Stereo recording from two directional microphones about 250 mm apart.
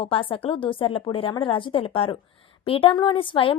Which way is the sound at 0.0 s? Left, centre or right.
Left.